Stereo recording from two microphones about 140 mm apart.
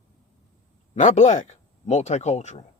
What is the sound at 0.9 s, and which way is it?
Speech, 55° left (ahead or behind).